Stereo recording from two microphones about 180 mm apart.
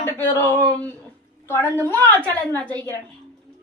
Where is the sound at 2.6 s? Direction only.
25° right (ahead or behind).